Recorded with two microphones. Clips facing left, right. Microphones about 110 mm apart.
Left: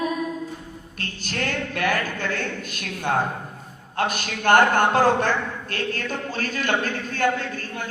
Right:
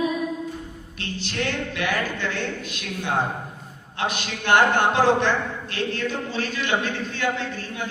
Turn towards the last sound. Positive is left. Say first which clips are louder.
# left 3 dB
turn(degrees=45)  # may be behind; listen again after turning